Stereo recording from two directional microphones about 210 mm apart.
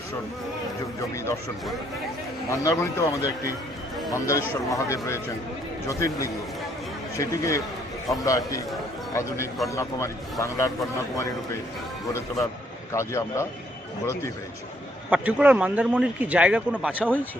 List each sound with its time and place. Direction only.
1.1 s a man's voice: 15° left (ahead or behind)
2.5 s a man's voice: 15° left (ahead or behind)
9.6 s a man's voice: 15° left (ahead or behind)
12.9 s a man's voice: 15° left (ahead or behind)
15.1 s speech: 5° right (ahead or behind)